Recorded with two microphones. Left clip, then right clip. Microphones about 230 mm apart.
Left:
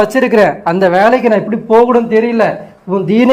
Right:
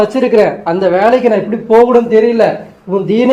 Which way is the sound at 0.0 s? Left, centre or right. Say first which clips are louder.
Even; left.